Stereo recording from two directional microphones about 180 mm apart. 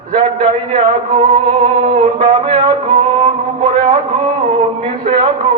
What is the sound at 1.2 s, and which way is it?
Music, 25° right (ahead or behind).